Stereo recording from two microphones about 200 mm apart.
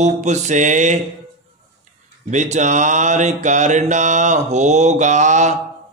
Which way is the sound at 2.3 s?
35° right (ahead or behind).